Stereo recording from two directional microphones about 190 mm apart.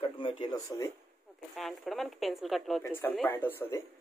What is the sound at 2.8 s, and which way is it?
Speech, 10° left (ahead or behind).